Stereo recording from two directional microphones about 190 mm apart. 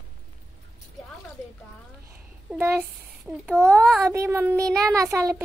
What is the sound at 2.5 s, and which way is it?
A child's voice, 5° right (ahead or behind).